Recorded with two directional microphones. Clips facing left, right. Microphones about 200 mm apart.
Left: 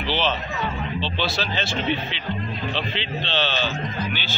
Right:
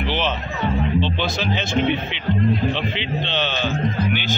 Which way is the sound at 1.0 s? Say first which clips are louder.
Right 3 dB; 15° right (ahead or behind).